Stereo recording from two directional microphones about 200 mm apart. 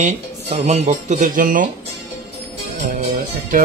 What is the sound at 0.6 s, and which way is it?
Speech, 30° right (ahead or behind).